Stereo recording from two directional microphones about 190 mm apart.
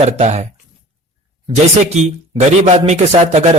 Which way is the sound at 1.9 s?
35° right (ahead or behind).